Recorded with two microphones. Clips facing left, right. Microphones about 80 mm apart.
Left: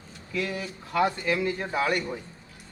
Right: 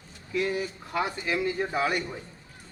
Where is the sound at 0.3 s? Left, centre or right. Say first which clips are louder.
Right 3 dB; right.